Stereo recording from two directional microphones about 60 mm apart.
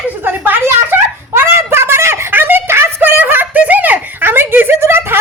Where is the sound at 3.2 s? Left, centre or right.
Right.